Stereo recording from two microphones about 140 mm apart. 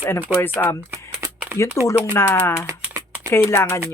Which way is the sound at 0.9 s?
10° right (ahead or behind).